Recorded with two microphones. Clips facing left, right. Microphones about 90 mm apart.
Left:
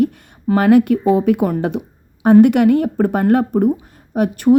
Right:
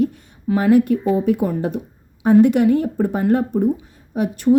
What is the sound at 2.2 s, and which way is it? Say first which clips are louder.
A woman's voice: left 3 dB; 65° left (ahead or behind).